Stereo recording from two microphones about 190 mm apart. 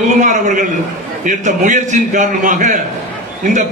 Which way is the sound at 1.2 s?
45° right (ahead or behind).